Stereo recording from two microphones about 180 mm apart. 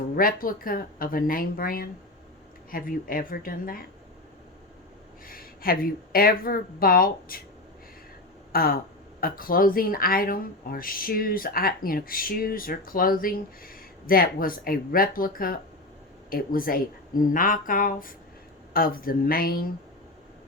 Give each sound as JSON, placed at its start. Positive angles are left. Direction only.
{"t": 0.2, "sound": "speech", "side_deg": 50}
{"t": 5.2, "sound": "speech", "side_deg": 55}
{"t": 8.5, "sound": "a woman's voice", "side_deg": 55}